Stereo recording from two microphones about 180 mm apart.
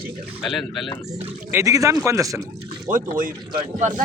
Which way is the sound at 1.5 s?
15° right (ahead or behind).